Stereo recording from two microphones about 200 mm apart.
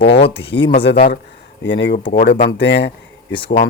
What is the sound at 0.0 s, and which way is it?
Speech, 55° left (ahead or behind).